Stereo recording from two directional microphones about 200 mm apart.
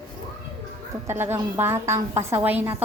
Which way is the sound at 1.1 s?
10° right (ahead or behind).